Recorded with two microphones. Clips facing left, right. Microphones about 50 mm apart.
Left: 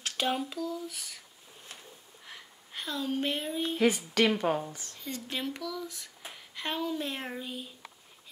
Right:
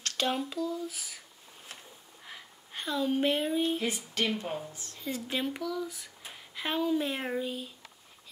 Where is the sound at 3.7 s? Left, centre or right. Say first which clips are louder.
Left 6 dB; left.